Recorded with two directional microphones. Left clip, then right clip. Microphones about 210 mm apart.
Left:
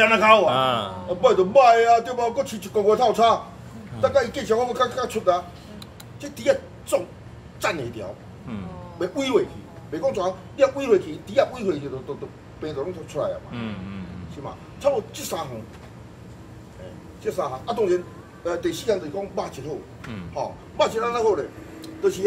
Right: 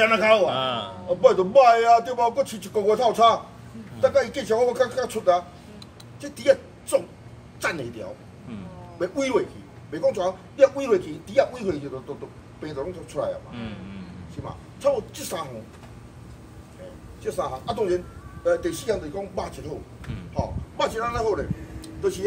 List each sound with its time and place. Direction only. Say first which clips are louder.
0.0 s a man's voice: left 3 dB; 10° right (ahead or behind)
0.5 s speech: left 5 dB; 20° left (ahead or behind)
1.0 s a man's voice: right 1 dB; 10° right (ahead or behind)
9.0 s a man's voice: left 1 dB; 10° right (ahead or behind)
13.5 s speech: left 3 dB; 20° left (ahead or behind)
14.4 s a man's voice: left 1 dB; 10° right (ahead or behind)
17.2 s a man's voice: left 2 dB; 10° right (ahead or behind)
20.7 s a man's voice: left 3 dB; 10° right (ahead or behind)